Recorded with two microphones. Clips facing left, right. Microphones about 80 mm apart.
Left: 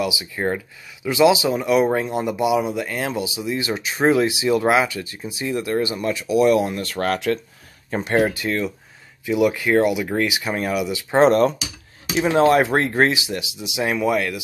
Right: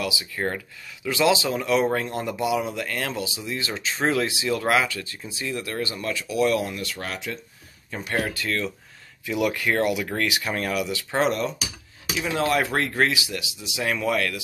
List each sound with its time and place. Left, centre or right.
0.0 s speech: centre
6.7 s speech: left
8.0 s speech: left; by 11.0 s centre
11.1 s speech: left